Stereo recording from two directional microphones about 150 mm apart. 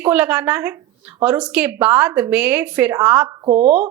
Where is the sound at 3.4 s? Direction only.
30° right (ahead or behind).